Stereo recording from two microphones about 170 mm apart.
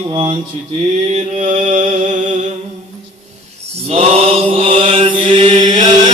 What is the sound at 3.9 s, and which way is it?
Mantra, 35° right (ahead or behind).